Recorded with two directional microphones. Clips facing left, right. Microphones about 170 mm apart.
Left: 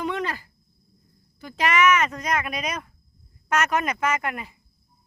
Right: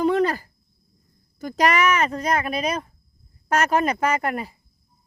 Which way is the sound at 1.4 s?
40° right (ahead or behind).